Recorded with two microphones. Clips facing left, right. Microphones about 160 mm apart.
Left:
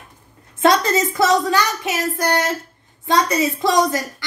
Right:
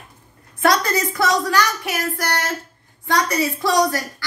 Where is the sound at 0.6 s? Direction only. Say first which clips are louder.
Left 3 dB; 20° left (ahead or behind).